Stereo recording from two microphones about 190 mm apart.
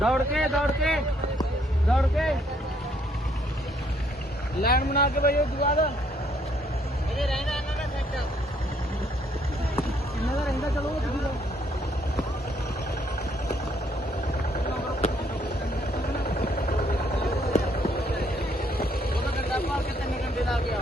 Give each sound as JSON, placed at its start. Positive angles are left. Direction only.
{"t": 0.0, "sound": "a man's voice", "side_deg": 0}
{"t": 4.6, "sound": "speech", "side_deg": 55}
{"t": 7.2, "sound": "a man's voice", "side_deg": 0}
{"t": 16.2, "sound": "vehicle", "side_deg": 50}
{"t": 17.2, "sound": "a sound", "side_deg": 55}